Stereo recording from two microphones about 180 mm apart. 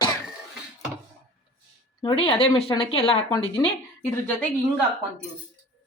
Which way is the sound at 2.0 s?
30° left (ahead or behind).